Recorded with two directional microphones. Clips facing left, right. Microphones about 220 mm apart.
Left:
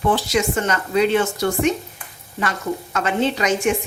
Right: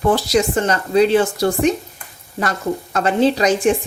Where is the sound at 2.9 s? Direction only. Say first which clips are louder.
Right 5 dB; 35° right (ahead or behind).